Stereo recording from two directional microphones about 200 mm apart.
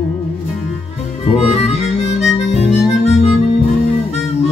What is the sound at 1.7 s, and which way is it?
Harmonica, 30° left (ahead or behind).